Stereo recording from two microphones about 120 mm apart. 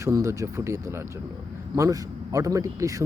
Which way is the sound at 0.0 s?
25° right (ahead or behind).